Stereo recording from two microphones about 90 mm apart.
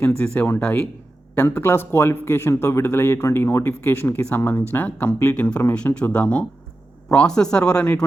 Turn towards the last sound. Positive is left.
turn(degrees=15)  # may be behind; listen again after turning